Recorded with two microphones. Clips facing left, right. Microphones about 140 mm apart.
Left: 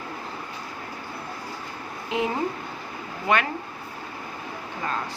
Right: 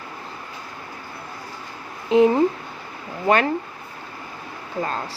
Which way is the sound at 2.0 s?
35° right (ahead or behind).